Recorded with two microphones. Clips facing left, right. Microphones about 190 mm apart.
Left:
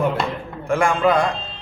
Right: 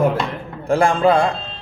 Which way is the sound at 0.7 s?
35° right (ahead or behind).